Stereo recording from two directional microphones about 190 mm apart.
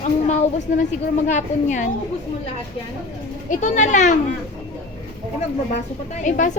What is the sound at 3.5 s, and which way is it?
Speech, 40° left (ahead or behind).